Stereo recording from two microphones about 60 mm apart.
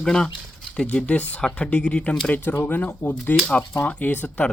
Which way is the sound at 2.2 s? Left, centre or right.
Left.